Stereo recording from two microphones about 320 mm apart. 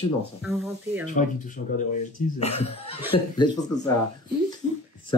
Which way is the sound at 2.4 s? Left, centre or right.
Centre.